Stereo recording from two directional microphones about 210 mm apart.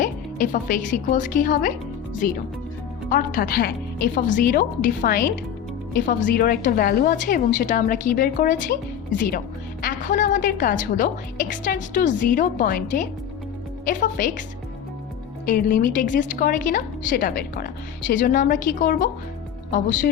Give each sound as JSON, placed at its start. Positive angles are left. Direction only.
{"t": 0.0, "sound": "a woman's voice", "side_deg": 40}
{"t": 15.4, "sound": "a woman's voice", "side_deg": 40}